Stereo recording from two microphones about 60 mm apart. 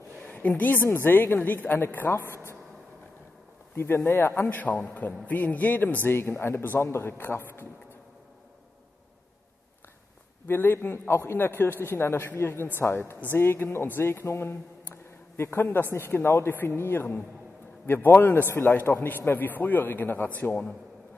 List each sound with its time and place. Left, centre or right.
0.2 s a sound: left
0.8 s a man's voice: left
2.0 s speech: left
3.7 s speech: left
4.6 s a man's voice: left
6.0 s a man's voice: left
10.4 s a man's voice: left